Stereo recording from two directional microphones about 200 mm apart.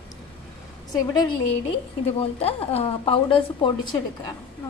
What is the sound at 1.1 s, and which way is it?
A woman's voice, 20° left (ahead or behind).